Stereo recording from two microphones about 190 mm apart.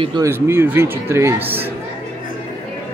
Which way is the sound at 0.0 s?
25° right (ahead or behind).